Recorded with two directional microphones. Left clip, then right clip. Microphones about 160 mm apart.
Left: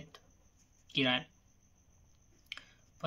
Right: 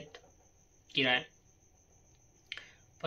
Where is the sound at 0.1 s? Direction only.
40° left (ahead or behind).